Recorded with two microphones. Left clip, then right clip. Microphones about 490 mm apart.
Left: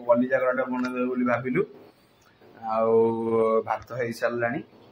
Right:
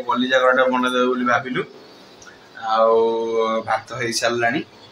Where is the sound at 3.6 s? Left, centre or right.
Left.